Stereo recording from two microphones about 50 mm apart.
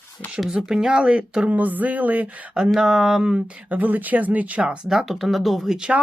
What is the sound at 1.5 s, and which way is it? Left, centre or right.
Speech, right.